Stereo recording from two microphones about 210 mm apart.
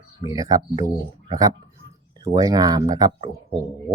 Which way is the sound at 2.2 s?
20° right (ahead or behind).